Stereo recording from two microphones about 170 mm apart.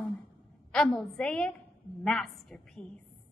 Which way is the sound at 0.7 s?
5° left (ahead or behind).